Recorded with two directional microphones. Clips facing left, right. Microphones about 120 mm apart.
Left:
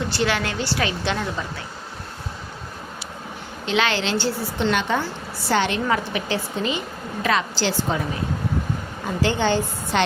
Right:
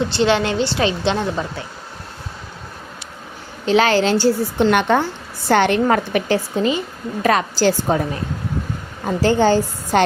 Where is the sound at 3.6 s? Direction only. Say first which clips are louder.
Right 7 dB; 40° right (ahead or behind).